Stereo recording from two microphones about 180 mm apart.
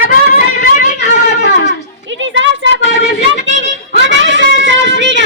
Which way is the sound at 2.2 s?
90° right.